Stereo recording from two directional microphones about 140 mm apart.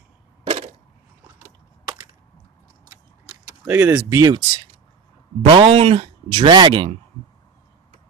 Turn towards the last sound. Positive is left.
turn(degrees=-35)  # may be behind; listen again after turning